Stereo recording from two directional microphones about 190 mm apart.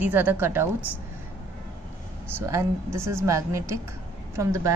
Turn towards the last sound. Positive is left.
turn(degrees=-15)  # may be behind; listen again after turning